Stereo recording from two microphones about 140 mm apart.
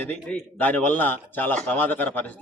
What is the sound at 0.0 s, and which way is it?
Speech, 10° left (ahead or behind).